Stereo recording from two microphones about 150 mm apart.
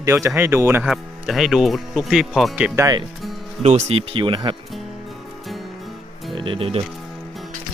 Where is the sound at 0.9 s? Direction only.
Centre (ahead or behind).